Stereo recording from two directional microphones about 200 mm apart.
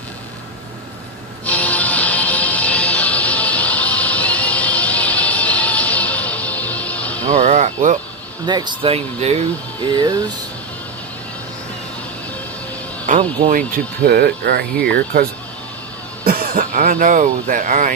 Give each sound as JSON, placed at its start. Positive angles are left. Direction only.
{"t": 1.5, "sound": "music", "side_deg": 5}
{"t": 7.3, "sound": "a sound", "side_deg": -35}
{"t": 8.4, "sound": "speech", "side_deg": -20}
{"t": 13.5, "sound": "speech", "side_deg": -45}